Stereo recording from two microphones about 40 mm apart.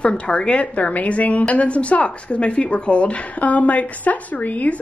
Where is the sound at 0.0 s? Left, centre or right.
Left.